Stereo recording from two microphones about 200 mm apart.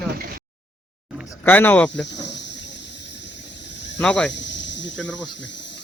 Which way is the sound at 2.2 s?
60° left (ahead or behind).